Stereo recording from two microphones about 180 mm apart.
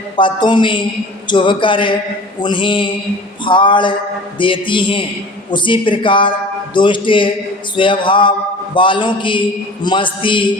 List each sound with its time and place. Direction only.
0.2 s speech: 25° left (ahead or behind)